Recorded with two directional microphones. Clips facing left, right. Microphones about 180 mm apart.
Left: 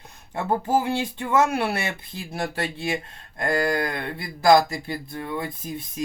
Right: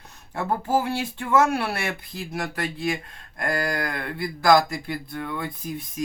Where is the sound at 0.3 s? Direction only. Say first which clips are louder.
Left 1 dB; 20° left (ahead or behind).